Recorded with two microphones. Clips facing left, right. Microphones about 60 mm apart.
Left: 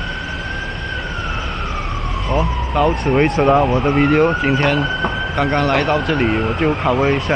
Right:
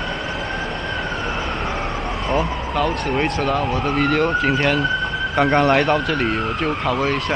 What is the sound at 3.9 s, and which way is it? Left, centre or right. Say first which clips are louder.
Speech: left 3 dB; centre.